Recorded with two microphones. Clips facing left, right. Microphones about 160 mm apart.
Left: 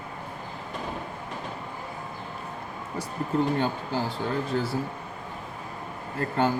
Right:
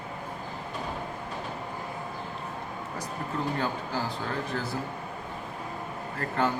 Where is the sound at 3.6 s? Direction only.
30° left (ahead or behind).